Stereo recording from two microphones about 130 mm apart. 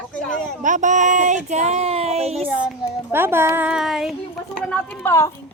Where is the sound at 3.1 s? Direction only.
15° right (ahead or behind).